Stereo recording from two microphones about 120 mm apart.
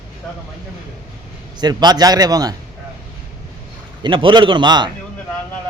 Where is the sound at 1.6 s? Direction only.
35° right (ahead or behind).